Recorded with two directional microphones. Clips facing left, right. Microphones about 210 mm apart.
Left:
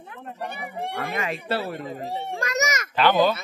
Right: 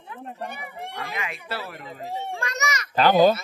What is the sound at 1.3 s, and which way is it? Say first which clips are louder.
Speech: left 7 dB; 30° left (ahead or behind).